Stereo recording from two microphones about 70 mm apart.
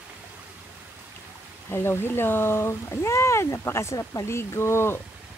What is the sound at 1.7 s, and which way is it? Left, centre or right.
Speech, left.